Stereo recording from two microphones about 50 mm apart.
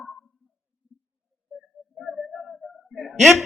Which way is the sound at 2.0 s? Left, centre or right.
Centre.